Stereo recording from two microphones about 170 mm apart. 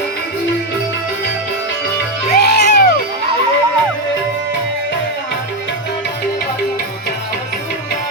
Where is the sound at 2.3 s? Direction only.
80° left.